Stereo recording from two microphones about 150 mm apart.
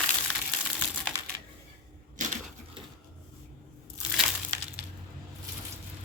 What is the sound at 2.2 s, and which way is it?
Crushing, 60° right (ahead or behind).